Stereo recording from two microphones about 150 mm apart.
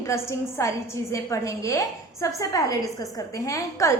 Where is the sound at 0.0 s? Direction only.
20° left (ahead or behind).